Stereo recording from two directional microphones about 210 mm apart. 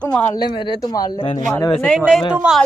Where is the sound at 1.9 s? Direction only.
5° right (ahead or behind).